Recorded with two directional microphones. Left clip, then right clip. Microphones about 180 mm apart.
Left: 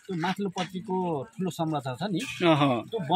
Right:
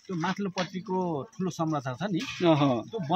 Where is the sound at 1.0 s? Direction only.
15° left (ahead or behind).